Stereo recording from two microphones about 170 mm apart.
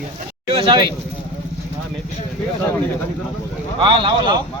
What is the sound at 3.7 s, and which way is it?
Speech, 30° right (ahead or behind).